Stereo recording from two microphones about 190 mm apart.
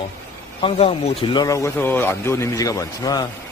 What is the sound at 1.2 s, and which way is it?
A man's voice, 25° left (ahead or behind).